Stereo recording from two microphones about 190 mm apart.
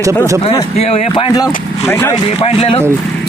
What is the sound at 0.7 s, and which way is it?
Speech, 35° left (ahead or behind).